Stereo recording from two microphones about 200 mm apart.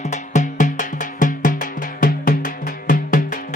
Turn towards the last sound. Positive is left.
turn(degrees=45)  # may be behind; listen again after turning